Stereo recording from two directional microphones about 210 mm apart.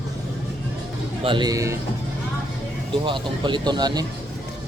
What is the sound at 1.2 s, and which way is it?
Speech, 20° right (ahead or behind).